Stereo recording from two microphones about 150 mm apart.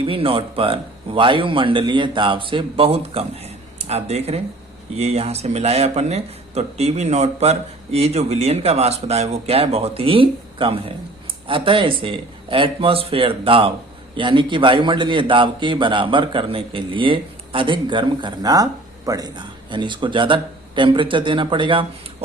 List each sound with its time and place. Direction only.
0.0 s a man's voice: 35° right (ahead or behind)